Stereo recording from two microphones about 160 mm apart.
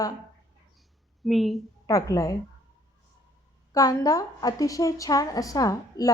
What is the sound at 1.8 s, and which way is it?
Speech, 20° left (ahead or behind).